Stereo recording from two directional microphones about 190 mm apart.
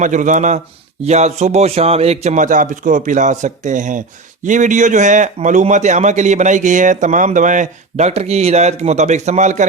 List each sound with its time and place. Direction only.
0.0 s a man's voice: 40° right (ahead or behind)